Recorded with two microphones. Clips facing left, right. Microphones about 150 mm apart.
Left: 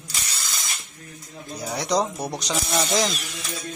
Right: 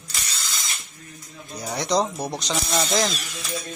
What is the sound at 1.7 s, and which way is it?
Speech, 10° left (ahead or behind).